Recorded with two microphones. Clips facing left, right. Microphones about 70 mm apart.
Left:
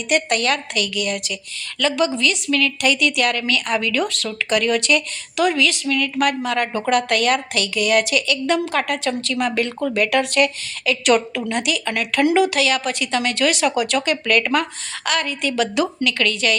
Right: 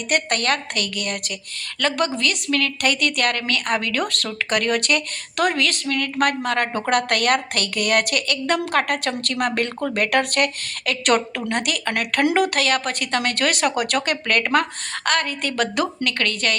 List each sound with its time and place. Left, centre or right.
0.1 s speech: right